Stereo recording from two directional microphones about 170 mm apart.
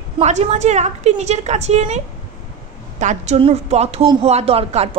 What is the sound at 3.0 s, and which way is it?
A woman's voice, 40° right (ahead or behind).